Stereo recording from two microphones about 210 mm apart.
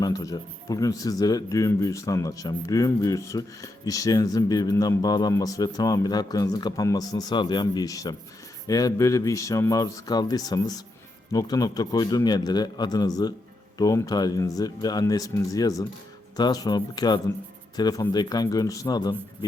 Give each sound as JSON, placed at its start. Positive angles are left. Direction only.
{"t": 0.0, "sound": "a man's voice", "side_deg": 15}